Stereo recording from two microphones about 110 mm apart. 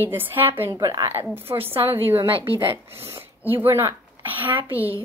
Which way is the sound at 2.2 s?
55° right (ahead or behind).